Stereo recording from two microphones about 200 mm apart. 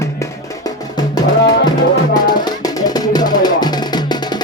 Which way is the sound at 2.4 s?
20° left (ahead or behind).